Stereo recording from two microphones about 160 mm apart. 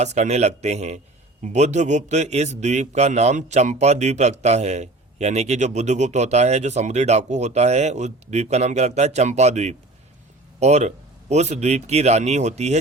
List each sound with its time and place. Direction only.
0.0 s a man's voice: 45° right (ahead or behind)